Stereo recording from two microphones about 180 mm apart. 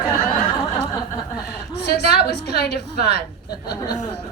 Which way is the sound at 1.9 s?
65° left (ahead or behind).